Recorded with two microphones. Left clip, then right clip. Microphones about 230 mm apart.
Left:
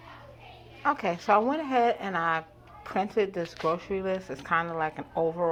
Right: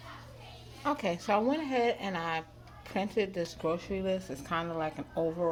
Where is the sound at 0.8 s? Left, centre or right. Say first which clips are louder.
Left 5 dB; left.